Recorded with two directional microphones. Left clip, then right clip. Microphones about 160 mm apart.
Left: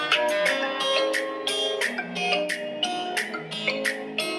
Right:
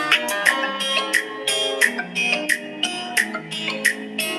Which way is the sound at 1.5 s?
25° right (ahead or behind).